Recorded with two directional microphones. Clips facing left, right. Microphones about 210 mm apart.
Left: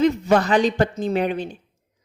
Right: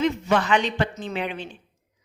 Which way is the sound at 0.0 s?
40° left (ahead or behind).